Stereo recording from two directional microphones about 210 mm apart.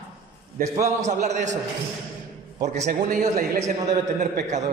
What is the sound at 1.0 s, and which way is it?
Speech, 35° right (ahead or behind).